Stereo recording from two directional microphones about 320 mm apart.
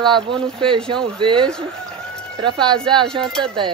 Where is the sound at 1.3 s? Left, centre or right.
Centre.